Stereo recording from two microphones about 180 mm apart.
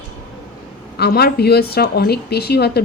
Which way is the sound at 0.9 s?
65° left (ahead or behind).